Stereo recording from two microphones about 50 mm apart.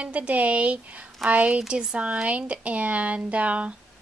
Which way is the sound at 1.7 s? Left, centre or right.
Centre.